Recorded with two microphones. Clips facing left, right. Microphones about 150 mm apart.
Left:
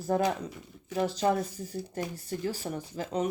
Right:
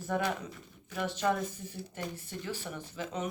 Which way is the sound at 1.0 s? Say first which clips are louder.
Left 4 dB; 35° left (ahead or behind).